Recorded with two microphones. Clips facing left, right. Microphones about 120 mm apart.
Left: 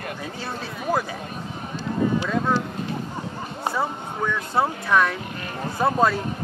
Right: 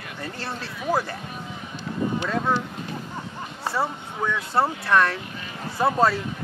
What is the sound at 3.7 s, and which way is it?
Speech, centre (ahead or behind).